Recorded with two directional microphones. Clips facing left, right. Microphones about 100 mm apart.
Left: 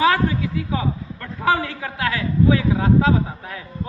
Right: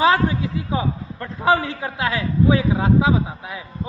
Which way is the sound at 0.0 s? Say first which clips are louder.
Right 1 dB; 25° right (ahead or behind).